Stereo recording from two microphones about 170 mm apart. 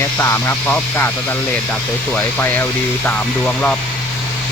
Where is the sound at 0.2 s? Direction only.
15° left (ahead or behind).